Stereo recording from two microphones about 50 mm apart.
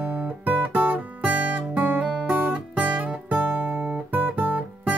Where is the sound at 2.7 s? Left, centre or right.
Right.